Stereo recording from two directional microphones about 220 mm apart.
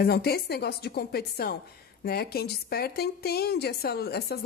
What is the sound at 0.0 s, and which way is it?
Speech, 45° left (ahead or behind).